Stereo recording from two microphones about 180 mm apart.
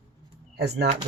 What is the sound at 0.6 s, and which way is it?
Speech, 65° right (ahead or behind).